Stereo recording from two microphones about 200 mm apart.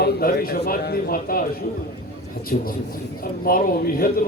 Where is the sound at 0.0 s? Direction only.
50° left (ahead or behind).